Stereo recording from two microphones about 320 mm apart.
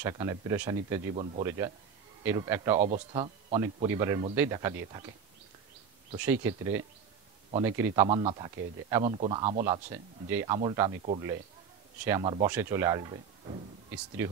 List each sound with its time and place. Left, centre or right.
0.0 s speech: centre
6.1 s speech: centre